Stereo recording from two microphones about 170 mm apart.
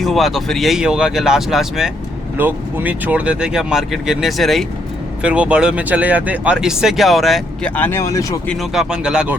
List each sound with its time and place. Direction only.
0.0 s speech: centre (ahead or behind)
7.8 s speech: 15° left (ahead or behind)
8.4 s speech: centre (ahead or behind)